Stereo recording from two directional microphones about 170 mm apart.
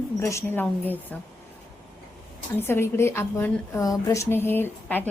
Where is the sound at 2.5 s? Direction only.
15° left (ahead or behind).